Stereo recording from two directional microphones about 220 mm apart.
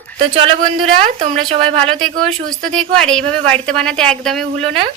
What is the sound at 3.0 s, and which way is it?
A woman's voice, 5° left (ahead or behind).